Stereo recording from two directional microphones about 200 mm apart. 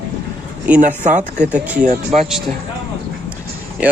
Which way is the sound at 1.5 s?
5° right (ahead or behind).